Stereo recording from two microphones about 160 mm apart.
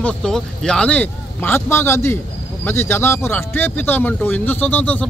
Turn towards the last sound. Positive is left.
turn(degrees=10)  # may be behind; listen again after turning